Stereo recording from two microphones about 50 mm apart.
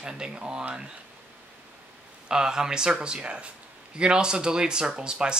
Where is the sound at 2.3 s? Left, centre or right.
Centre.